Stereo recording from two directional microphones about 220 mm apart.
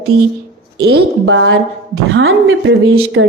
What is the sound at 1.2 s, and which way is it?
A woman's voice, 60° right (ahead or behind).